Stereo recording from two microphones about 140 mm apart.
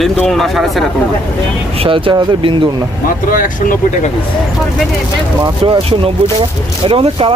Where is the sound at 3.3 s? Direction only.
75° left (ahead or behind).